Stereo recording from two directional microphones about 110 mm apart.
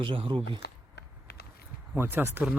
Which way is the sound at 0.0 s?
50° right (ahead or behind).